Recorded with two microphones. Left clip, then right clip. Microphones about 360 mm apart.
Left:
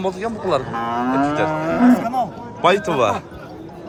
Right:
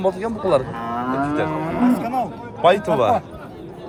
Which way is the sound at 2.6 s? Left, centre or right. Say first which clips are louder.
Even; centre.